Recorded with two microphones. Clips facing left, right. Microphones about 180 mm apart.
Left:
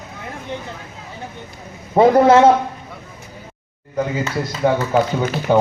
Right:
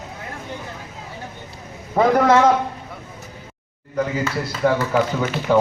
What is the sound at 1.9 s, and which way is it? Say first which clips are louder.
Speech: left 4 dB; 30° left (ahead or behind).